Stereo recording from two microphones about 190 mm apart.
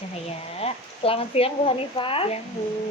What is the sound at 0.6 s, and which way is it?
Speech, 30° left (ahead or behind).